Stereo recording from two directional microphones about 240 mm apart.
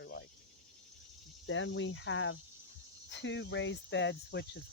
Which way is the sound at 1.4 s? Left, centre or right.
Left.